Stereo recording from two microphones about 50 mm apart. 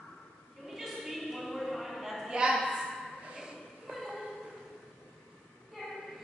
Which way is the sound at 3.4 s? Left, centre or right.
Centre.